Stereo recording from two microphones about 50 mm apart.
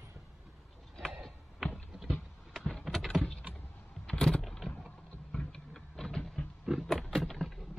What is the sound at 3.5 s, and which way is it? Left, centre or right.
Computer keyboard, centre.